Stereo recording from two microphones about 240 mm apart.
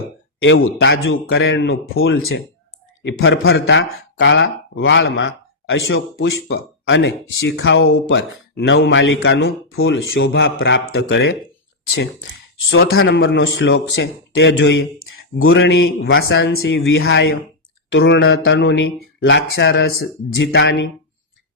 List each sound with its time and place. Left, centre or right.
0.4 s speech: left
6.5 s speech: left
12.7 s speech: left
15.4 s a sound: left
15.6 s speech: left